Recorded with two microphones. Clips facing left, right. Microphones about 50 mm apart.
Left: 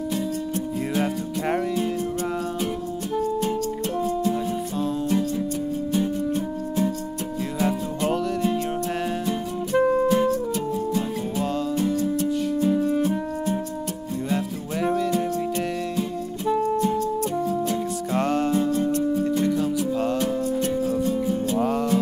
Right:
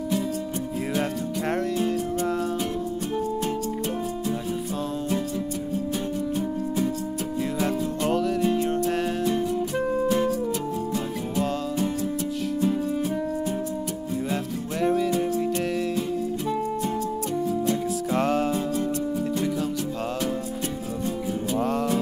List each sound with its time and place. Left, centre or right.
0.9 s music: centre
7.6 s music: centre
10.2 s music: centre
10.9 s music: centre